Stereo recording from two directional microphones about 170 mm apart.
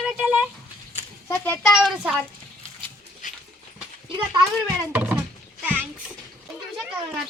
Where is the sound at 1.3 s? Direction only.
10° left (ahead or behind).